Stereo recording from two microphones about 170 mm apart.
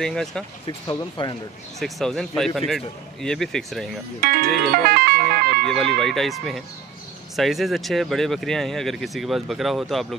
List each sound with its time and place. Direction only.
0.0 s speech: centre (ahead or behind)
0.7 s speech: 25° left (ahead or behind)
1.8 s speech: centre (ahead or behind)
4.2 s speech: 60° right (ahead or behind)
5.7 s speech: centre (ahead or behind)